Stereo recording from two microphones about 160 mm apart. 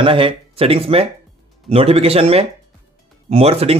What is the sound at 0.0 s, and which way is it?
Speech, 35° right (ahead or behind).